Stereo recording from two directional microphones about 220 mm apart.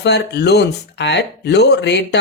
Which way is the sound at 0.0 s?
50° left (ahead or behind).